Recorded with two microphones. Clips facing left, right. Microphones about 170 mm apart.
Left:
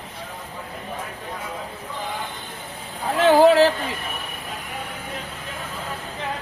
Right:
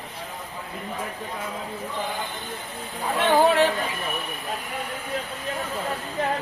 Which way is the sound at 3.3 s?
90° left.